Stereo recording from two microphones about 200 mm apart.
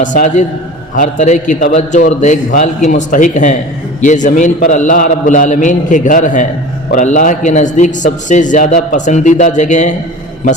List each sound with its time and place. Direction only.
0.0 s a man's voice: 40° left (ahead or behind)